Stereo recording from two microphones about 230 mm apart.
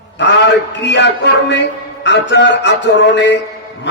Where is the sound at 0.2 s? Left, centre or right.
Left.